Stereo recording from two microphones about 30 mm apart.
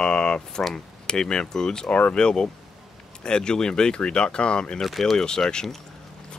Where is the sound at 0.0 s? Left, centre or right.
Left.